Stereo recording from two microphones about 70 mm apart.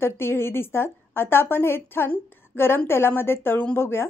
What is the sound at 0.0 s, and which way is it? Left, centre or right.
A woman's voice, left.